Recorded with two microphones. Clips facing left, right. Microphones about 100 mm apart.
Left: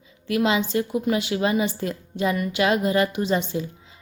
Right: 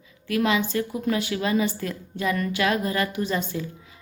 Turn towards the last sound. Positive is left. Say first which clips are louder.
# left 3 dB
turn(degrees=25)  # may be behind; listen again after turning